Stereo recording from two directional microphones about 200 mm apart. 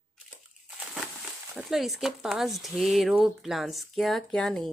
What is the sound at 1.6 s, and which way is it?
Speech, centre (ahead or behind).